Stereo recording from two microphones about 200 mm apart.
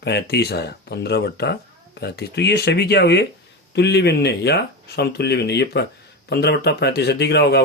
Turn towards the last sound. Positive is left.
turn(degrees=55)  # may be behind; listen again after turning